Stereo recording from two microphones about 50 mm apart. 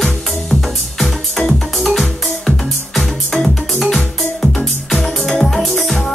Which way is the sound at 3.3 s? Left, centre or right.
Centre.